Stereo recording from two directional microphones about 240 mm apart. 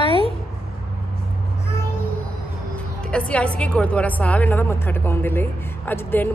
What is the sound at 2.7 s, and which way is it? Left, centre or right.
A woman's voice, centre.